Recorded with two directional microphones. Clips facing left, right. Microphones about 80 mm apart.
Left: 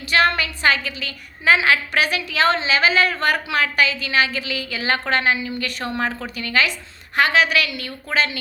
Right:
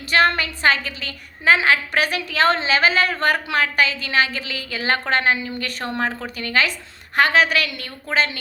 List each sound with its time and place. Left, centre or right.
0.1 s a woman's voice: right